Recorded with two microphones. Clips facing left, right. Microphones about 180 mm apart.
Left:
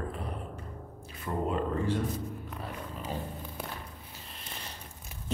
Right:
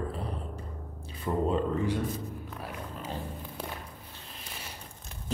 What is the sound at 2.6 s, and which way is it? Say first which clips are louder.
Roaring cats: even; 5° right (ahead or behind).